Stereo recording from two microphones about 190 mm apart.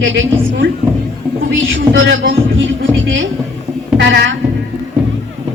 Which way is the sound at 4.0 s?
70° right (ahead or behind).